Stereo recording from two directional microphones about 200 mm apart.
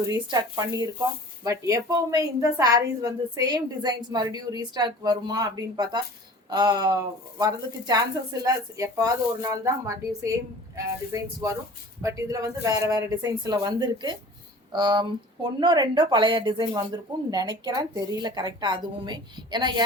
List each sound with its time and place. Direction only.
0.0 s a woman's voice: 20° right (ahead or behind)